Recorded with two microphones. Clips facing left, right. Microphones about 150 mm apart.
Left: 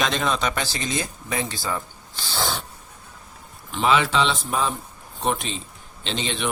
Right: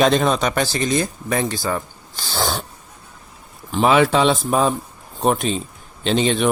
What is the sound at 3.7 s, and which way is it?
Speech, 45° right (ahead or behind).